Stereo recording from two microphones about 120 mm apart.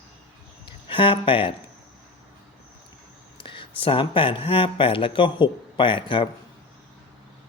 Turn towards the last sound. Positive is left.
turn(degrees=45)  # may be behind; listen again after turning